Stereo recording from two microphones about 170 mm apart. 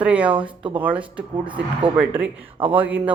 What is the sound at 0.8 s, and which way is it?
Speech, 10° right (ahead or behind).